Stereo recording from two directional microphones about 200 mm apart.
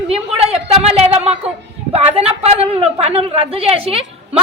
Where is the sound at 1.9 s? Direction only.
30° right (ahead or behind).